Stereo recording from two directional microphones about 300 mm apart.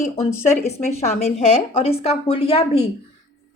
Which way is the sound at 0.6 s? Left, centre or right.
Left.